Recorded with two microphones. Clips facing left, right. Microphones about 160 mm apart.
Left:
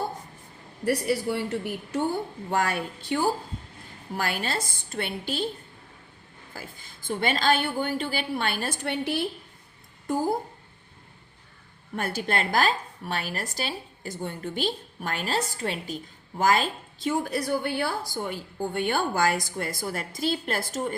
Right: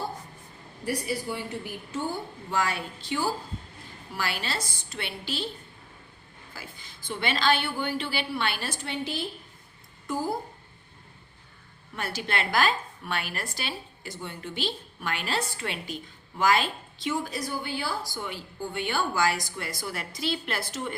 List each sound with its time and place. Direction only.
0.9 s a woman's voice: 65° left (ahead or behind); by 5.5 s 50° left (ahead or behind)
6.5 s a woman's voice: 50° left (ahead or behind)
11.9 s a woman's voice: 50° left (ahead or behind)